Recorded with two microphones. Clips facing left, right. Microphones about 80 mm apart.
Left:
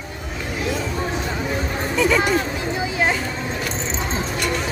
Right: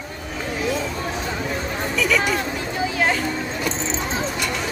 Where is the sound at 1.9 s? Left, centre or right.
Left.